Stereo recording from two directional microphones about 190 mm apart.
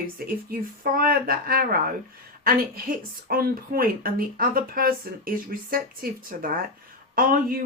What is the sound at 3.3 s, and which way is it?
Speech, 50° right (ahead or behind).